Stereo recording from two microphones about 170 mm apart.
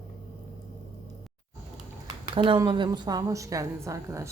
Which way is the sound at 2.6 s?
25° right (ahead or behind).